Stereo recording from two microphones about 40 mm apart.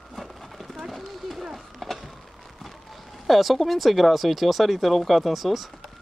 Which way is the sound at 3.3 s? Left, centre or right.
Centre.